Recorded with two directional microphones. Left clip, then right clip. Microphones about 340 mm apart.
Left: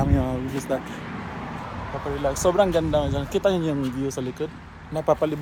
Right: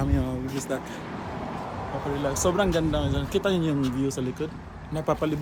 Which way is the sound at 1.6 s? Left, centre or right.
Right.